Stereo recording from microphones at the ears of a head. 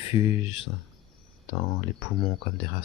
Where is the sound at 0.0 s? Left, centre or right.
Left.